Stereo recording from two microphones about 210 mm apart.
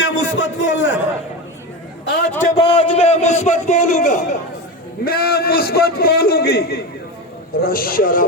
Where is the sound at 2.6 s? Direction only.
25° left (ahead or behind).